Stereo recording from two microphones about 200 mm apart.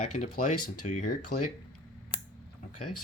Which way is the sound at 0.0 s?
35° left (ahead or behind).